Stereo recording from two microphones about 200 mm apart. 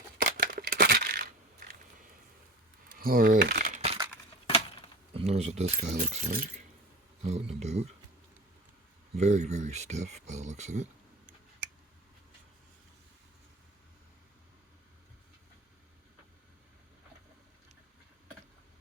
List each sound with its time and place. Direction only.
0.2 s coin: 45° right (ahead or behind)
3.0 s speech: 45° right (ahead or behind)
3.8 s a sound: 30° right (ahead or behind)
5.1 s speech: 30° right (ahead or behind)
7.2 s speech: 30° right (ahead or behind)
9.1 s speech: 35° right (ahead or behind)